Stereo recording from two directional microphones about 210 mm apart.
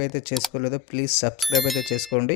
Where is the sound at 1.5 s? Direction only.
Centre (ahead or behind).